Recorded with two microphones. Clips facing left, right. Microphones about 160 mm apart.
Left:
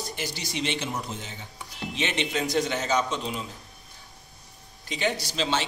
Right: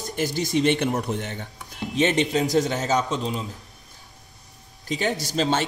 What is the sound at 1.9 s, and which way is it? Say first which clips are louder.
A man's voice: right 8 dB; 45° right (ahead or behind).